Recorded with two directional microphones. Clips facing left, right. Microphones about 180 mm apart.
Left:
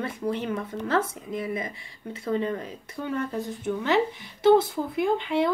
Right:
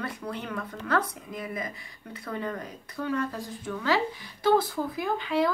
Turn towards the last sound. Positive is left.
turn(degrees=25)  # may be behind; listen again after turning